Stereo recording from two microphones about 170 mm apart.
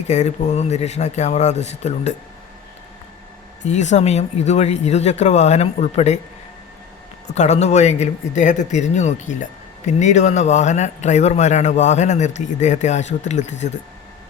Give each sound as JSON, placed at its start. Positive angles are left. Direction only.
{"t": 0.1, "sound": "speech", "side_deg": 40}
{"t": 3.6, "sound": "speech", "side_deg": 45}
{"t": 7.3, "sound": "speech", "side_deg": 40}